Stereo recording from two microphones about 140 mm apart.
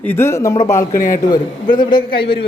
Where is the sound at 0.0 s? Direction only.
15° left (ahead or behind).